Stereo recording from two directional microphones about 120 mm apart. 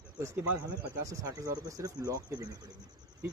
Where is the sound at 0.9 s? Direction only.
25° right (ahead or behind).